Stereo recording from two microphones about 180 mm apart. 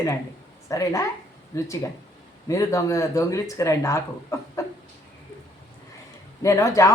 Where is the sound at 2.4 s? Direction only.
20° left (ahead or behind).